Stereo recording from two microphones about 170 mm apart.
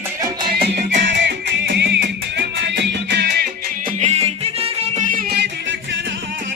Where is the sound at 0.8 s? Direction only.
90° right; by 3.9 s 65° right (ahead or behind).